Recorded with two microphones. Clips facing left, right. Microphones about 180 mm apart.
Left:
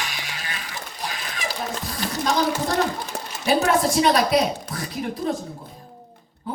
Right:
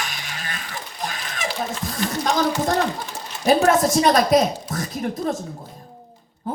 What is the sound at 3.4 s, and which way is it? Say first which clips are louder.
A woman's voice: right 3 dB; 45° right (ahead or behind).